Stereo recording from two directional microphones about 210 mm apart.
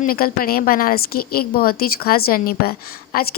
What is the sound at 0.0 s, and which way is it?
A woman's voice, 45° left (ahead or behind).